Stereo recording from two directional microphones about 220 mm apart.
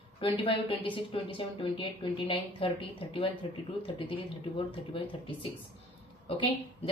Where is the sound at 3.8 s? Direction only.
25° left (ahead or behind).